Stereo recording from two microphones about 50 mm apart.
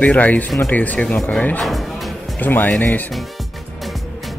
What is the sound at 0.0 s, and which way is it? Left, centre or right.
Speech, left.